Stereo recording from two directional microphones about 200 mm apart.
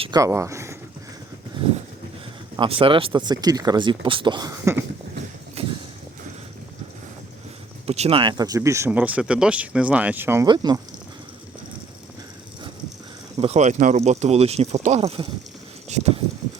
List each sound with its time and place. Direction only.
0.0 s speech: 20° right (ahead or behind)
2.6 s speech: 25° right (ahead or behind)
5.6 s a sound: 30° right (ahead or behind)
7.9 s speech: 30° right (ahead or behind)
13.3 s speech: 30° right (ahead or behind)